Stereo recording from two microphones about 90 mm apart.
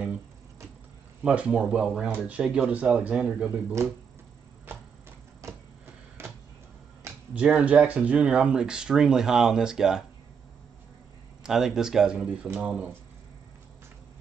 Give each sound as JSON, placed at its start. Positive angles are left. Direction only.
{"t": 1.2, "sound": "speech", "side_deg": -15}
{"t": 6.2, "sound": "a sound", "side_deg": -25}
{"t": 7.3, "sound": "speech", "side_deg": -15}
{"t": 11.4, "sound": "speech", "side_deg": -5}